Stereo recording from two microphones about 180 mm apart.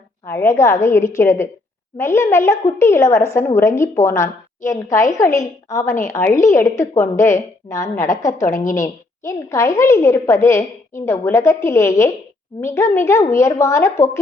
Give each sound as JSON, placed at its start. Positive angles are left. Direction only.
{"t": 0.3, "sound": "a woman's voice", "side_deg": 15}